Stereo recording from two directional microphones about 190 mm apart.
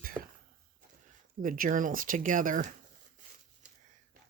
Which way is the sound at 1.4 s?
45° right (ahead or behind).